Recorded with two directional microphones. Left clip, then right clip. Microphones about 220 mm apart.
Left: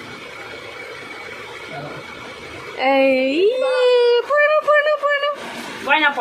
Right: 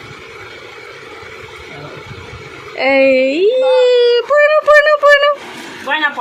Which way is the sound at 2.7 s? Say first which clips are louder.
Right 5 dB; 15° right (ahead or behind).